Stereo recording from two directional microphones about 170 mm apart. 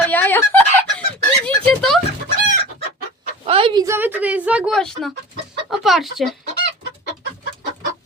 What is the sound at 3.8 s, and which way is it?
Speech, 15° right (ahead or behind).